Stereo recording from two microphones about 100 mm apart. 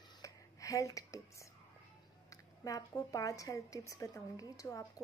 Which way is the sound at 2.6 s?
35° left (ahead or behind).